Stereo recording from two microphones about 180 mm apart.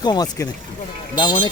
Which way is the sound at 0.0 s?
20° left (ahead or behind).